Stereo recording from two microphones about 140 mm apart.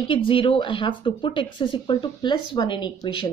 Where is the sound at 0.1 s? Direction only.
40° left (ahead or behind).